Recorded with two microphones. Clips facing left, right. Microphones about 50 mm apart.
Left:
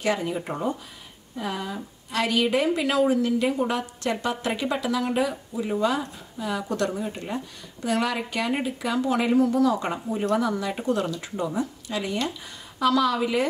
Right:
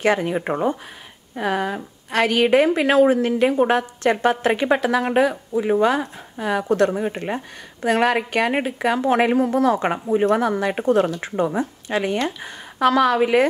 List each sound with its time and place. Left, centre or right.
0.0 s a woman's voice: right